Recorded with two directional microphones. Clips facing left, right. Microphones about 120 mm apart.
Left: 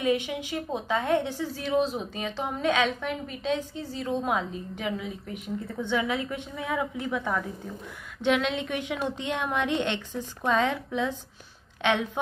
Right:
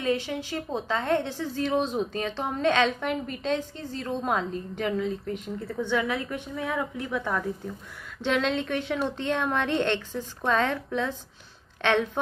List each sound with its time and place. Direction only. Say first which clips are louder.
0.0 s a woman's voice: left 1 dB; 15° left (ahead or behind)
5.9 s a woman's voice: even; 20° left (ahead or behind)
6.8 s a woman's voice: even; 10° left (ahead or behind)